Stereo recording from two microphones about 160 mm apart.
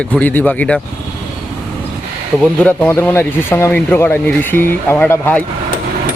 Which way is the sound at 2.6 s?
15° left (ahead or behind).